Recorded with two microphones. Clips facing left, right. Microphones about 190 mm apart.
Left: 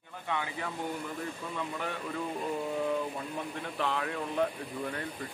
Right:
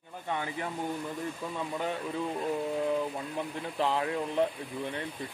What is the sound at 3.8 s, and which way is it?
Speech, 30° right (ahead or behind).